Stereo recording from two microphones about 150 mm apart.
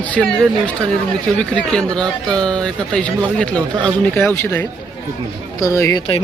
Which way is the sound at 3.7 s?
30° right (ahead or behind).